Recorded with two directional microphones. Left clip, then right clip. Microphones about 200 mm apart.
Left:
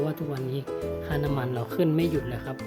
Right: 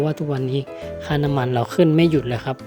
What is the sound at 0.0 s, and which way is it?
Speech, 35° right (ahead or behind).